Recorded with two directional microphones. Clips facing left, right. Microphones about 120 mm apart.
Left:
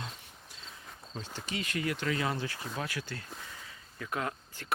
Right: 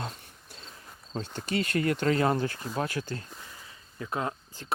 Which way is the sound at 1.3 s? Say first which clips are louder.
Right 7 dB; 55° right (ahead or behind).